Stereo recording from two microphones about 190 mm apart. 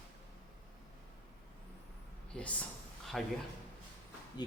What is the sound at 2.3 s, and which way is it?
Speech, 5° left (ahead or behind).